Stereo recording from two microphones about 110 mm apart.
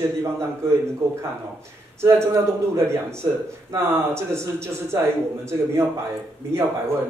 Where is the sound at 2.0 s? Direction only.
25° right (ahead or behind).